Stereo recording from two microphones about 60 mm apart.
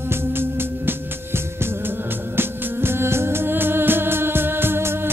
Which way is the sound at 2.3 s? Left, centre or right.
Right.